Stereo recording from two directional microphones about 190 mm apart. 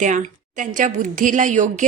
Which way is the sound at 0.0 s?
40° right (ahead or behind).